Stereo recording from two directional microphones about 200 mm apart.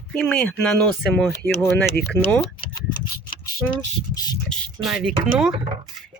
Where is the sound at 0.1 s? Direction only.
5° left (ahead or behind).